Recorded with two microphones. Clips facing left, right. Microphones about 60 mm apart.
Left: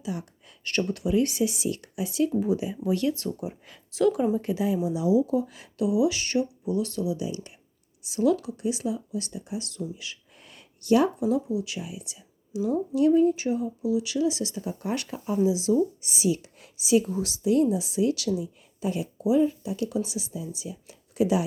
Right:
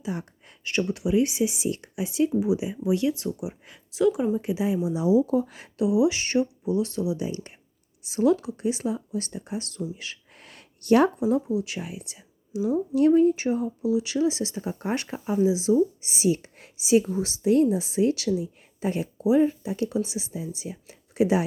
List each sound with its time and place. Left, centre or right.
0.0 s speech: right
0.6 s speech: centre
2.3 s speech: centre
4.9 s speech: right
5.2 s speech: right
5.8 s speech: right
7.3 s speech: right
10.3 s a sound: right
11.4 s speech: right
16.7 s a woman's voice: right